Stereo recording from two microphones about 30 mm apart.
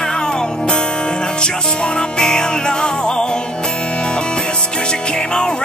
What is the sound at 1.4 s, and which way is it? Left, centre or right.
Music, left.